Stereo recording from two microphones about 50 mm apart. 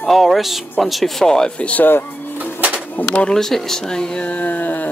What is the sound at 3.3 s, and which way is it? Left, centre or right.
Speech, centre.